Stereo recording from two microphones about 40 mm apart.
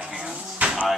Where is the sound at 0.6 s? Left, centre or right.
Right.